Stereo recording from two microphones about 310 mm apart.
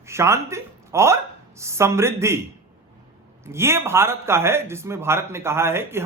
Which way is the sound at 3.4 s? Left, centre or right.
Centre.